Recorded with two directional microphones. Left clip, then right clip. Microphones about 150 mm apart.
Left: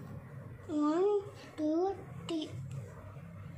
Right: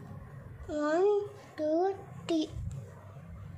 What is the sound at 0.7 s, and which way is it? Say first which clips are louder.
Babbling: right 3 dB; 55° right (ahead or behind).